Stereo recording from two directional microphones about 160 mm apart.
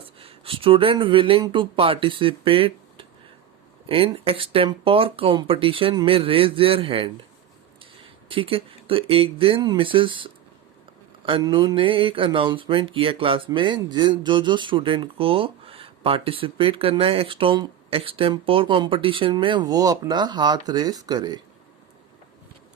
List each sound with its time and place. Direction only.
0.2 s speech: 35° right (ahead or behind)
8.3 s speech: 35° right (ahead or behind)